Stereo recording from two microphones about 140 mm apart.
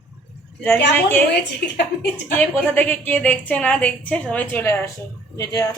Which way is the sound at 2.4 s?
10° left (ahead or behind).